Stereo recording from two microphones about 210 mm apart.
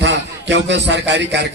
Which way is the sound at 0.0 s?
55° right (ahead or behind).